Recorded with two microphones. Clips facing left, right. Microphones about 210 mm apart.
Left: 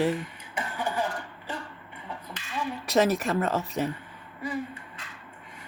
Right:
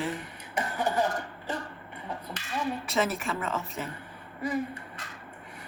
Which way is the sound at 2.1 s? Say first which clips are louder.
Right 3 dB; 40° right (ahead or behind).